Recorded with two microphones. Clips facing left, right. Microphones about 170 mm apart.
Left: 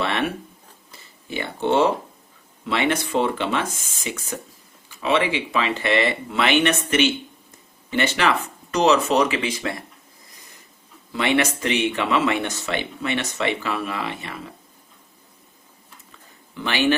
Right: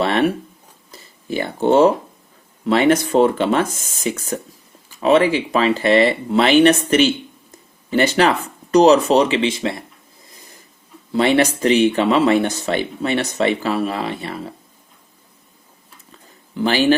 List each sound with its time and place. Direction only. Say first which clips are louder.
0.0 s speech: right 7 dB; 40° right (ahead or behind)
0.9 s a sound: right 8 dB; 40° right (ahead or behind)
2.6 s speech: right 8 dB; 40° right (ahead or behind); by 9.7 s 25° right (ahead or behind)
11.1 s speech: right 6 dB; 35° right (ahead or behind)
16.6 s speech: right 8 dB; 35° right (ahead or behind)